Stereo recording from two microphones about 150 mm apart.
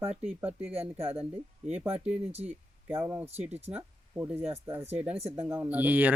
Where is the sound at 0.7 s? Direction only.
40° right (ahead or behind).